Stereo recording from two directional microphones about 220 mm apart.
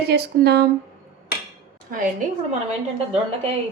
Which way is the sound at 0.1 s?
50° right (ahead or behind).